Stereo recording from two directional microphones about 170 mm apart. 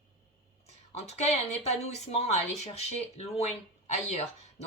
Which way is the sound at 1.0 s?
40° left (ahead or behind).